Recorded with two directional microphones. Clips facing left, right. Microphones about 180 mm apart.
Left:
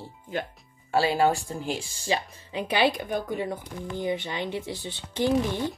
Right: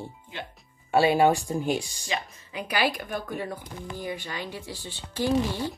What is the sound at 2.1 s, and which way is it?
Speech, 25° left (ahead or behind).